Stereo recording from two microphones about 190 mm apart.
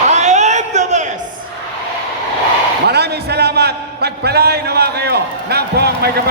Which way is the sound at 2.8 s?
60° right (ahead or behind).